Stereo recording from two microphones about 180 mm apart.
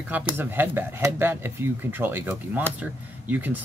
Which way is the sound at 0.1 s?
10° right (ahead or behind).